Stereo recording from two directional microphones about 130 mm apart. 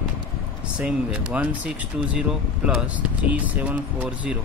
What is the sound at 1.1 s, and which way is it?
Speech, 10° right (ahead or behind).